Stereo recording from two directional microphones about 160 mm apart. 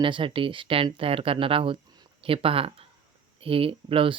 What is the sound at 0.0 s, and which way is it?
Speech, 30° right (ahead or behind).